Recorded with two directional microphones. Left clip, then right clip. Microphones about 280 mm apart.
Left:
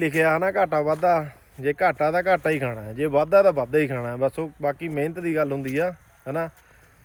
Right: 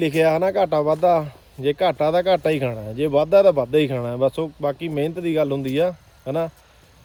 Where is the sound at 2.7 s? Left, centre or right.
Centre.